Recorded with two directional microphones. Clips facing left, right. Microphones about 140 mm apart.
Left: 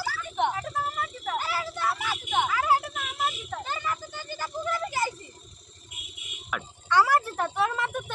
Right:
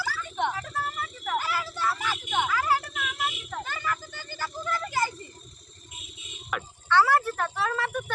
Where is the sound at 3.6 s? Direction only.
20° left (ahead or behind).